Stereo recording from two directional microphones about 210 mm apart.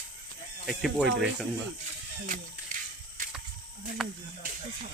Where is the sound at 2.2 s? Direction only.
35° right (ahead or behind).